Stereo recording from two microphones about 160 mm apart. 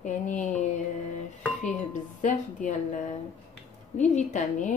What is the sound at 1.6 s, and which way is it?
A woman's voice, 50° left (ahead or behind).